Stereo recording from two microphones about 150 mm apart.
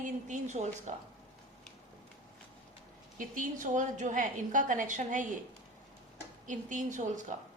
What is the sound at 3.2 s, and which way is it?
A woman's voice, 60° right (ahead or behind).